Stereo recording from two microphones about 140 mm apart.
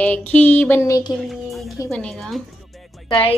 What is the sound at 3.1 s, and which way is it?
Speech, 40° left (ahead or behind).